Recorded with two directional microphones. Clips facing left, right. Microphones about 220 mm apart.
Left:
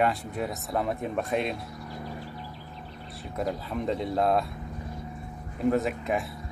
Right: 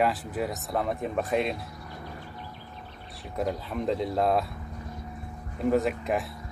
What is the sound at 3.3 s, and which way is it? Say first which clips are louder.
Speech: right 1 dB; centre (ahead or behind).